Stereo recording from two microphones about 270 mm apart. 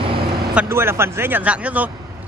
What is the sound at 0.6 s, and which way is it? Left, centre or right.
Speech, centre.